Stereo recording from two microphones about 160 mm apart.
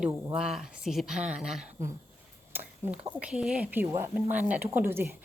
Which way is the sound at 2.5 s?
10° right (ahead or behind).